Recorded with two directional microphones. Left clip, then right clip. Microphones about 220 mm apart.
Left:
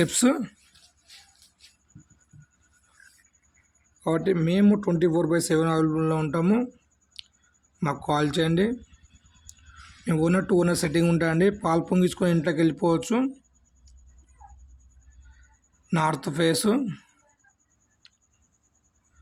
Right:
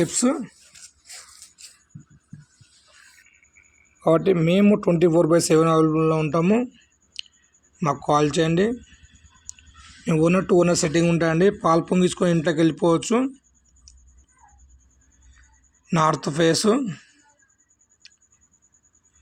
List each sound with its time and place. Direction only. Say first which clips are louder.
0.0 s speech: right 1 dB; 10° left (ahead or behind)
0.8 s music: right 10 dB; 50° right (ahead or behind)
4.0 s a man's voice: right 6 dB; 10° right (ahead or behind)
7.8 s speech: right 5 dB; centre (ahead or behind)
9.5 s a sound: right 10 dB; centre (ahead or behind)
10.1 s speech: right 5 dB; centre (ahead or behind)
15.9 s speech: right 5 dB; centre (ahead or behind)